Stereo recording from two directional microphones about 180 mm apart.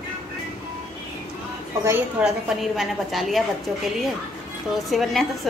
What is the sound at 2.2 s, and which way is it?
A woman's voice, 5° right (ahead or behind).